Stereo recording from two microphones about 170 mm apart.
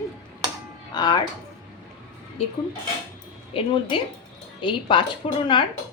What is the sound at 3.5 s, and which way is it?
A woman's voice, 30° left (ahead or behind).